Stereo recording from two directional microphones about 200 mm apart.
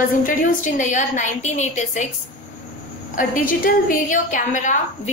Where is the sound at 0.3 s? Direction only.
40° left (ahead or behind).